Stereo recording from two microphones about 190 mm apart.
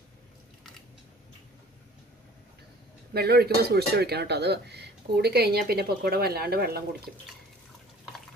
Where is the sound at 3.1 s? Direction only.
55° right (ahead or behind).